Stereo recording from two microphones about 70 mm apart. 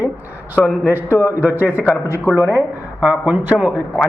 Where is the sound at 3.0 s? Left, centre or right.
Centre.